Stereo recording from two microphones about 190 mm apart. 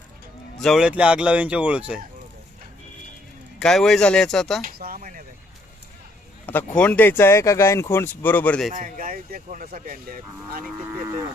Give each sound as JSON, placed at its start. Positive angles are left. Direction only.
{"t": 0.6, "sound": "speech", "side_deg": 0}
{"t": 3.6, "sound": "speech", "side_deg": 0}
{"t": 4.9, "sound": "speech", "side_deg": -45}
{"t": 6.4, "sound": "speech", "side_deg": 10}
{"t": 8.7, "sound": "speech", "side_deg": -45}